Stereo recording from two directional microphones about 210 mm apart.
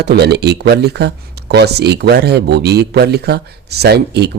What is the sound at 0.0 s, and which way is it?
Speech, 50° right (ahead or behind).